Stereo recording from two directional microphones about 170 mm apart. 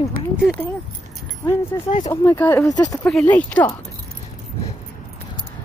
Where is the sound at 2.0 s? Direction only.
15° left (ahead or behind).